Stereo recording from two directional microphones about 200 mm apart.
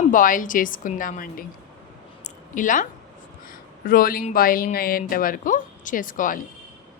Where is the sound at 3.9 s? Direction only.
45° left (ahead or behind).